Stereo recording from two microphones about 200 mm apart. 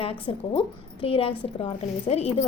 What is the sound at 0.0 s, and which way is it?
A woman's voice, 30° left (ahead or behind).